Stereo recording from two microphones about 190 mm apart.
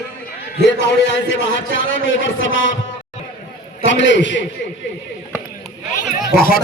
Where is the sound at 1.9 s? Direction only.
85° left.